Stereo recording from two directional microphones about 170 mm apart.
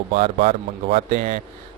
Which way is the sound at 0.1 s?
35° right (ahead or behind).